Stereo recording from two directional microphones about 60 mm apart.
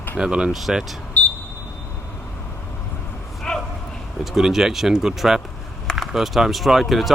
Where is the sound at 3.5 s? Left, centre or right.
Centre.